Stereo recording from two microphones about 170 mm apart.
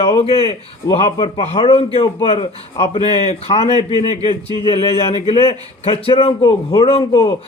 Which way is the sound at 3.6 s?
25° right (ahead or behind).